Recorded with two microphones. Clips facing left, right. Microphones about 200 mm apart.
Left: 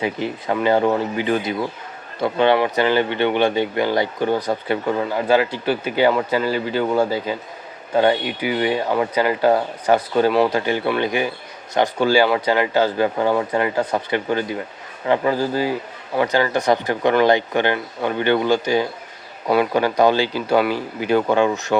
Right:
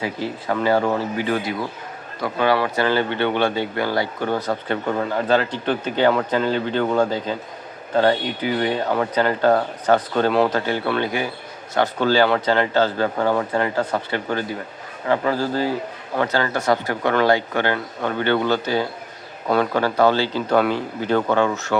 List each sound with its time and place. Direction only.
0.0 s speech: 20° left (ahead or behind)